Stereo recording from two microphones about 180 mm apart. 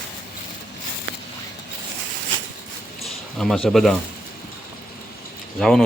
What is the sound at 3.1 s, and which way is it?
Speech, centre (ahead or behind).